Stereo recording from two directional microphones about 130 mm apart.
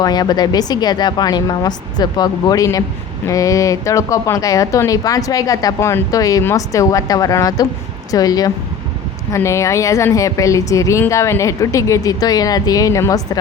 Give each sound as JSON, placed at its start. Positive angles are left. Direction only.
{"t": 0.0, "sound": "a woman's voice", "side_deg": 30}